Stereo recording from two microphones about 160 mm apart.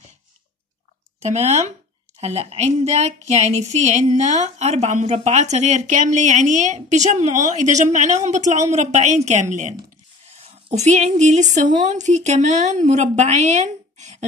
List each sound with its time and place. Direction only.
1.2 s a woman's voice: 45° right (ahead or behind)